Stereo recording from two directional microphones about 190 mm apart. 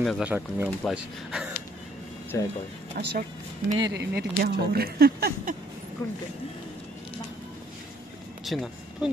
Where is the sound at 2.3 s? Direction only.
15° left (ahead or behind).